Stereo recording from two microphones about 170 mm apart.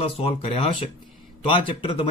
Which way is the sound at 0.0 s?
35° left (ahead or behind).